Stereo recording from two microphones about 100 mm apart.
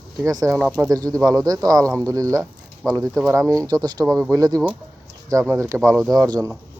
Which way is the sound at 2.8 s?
5° left (ahead or behind).